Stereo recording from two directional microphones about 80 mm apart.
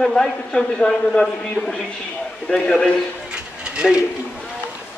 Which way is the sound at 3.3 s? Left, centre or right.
Centre.